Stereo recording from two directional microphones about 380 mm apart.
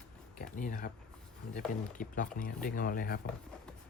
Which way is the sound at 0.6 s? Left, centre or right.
Left.